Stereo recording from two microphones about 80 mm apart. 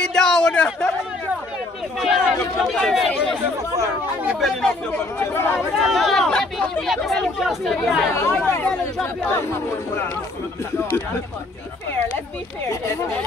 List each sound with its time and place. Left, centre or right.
0.0 s a sound: centre
2.0 s a sound: centre
4.4 s speech: centre
5.2 s speech: left
5.9 s speech: centre
8.1 s speech: left
8.6 s speech: centre